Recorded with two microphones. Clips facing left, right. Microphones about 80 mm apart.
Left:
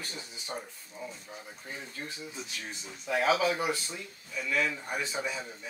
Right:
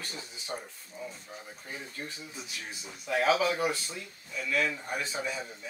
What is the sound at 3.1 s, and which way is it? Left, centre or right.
Speech, centre.